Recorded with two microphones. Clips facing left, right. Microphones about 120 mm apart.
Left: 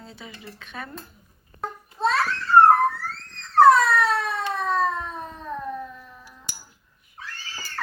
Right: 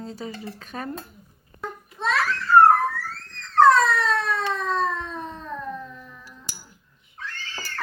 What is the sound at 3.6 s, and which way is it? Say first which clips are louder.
Wail: left 1 dB; 10° left (ahead or behind).